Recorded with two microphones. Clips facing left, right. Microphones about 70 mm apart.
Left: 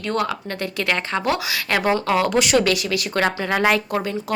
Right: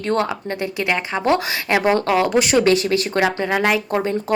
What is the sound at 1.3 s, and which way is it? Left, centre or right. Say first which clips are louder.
Speech: right 3 dB; right.